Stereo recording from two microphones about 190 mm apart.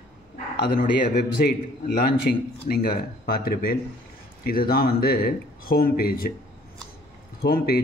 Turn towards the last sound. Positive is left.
turn(degrees=55)  # may be behind; listen again after turning